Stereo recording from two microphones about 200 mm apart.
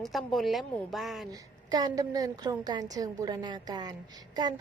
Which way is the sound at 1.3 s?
20° right (ahead or behind).